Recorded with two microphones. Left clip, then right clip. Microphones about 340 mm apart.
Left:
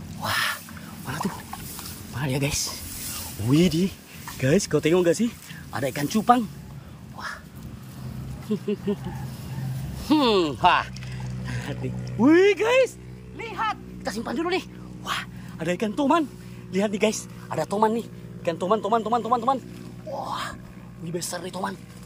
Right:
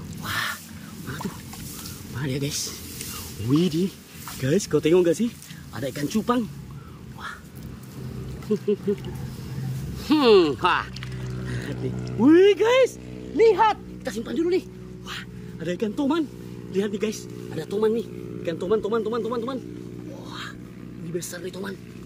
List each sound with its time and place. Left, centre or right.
0.2 s duck: centre
1.0 s dog: centre
2.1 s a man's voice: centre
8.5 s a man's voice: centre
10.0 s a man's voice: centre
13.4 s speech: centre
14.0 s a man's voice: centre
20.2 s a sound: centre
21.2 s a man's voice: centre